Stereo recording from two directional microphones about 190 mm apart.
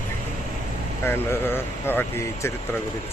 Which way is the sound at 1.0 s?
10° left (ahead or behind).